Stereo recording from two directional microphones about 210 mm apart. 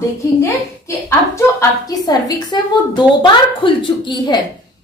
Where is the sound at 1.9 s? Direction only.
15° left (ahead or behind).